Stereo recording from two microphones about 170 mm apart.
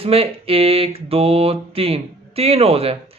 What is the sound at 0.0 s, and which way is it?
Speech, 35° right (ahead or behind).